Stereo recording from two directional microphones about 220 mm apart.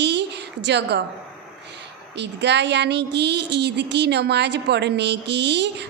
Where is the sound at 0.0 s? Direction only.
50° right (ahead or behind).